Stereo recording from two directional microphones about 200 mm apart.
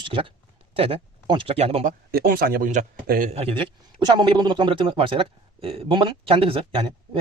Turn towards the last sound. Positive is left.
turn(degrees=-25)  # may be behind; listen again after turning